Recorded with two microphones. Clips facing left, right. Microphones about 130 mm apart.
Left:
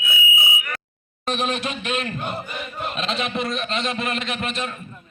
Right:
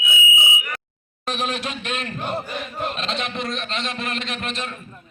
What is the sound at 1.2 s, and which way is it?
Speech, centre (ahead or behind).